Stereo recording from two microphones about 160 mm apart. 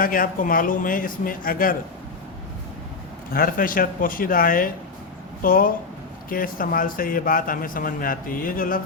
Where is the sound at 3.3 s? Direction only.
60° left (ahead or behind).